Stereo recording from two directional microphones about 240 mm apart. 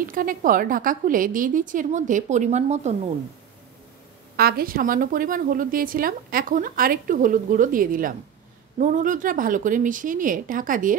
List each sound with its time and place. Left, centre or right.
0.0 s a woman's voice: right
4.4 s a woman's voice: right